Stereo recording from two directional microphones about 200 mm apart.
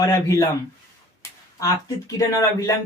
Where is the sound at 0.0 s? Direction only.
15° left (ahead or behind).